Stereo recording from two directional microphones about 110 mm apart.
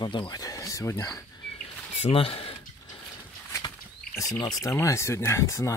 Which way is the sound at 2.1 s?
60° left (ahead or behind).